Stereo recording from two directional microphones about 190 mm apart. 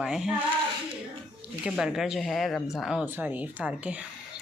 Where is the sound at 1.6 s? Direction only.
5° right (ahead or behind).